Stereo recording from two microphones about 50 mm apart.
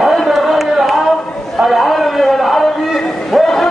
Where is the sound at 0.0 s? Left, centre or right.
Centre.